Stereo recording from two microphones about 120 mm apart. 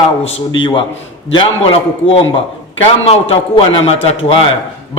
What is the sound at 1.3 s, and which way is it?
A man's voice, 50° left (ahead or behind).